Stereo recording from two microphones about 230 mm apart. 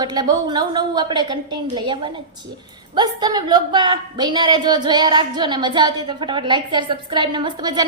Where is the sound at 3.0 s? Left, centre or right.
Centre.